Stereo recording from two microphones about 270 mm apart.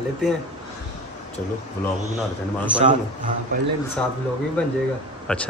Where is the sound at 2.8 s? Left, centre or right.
Right.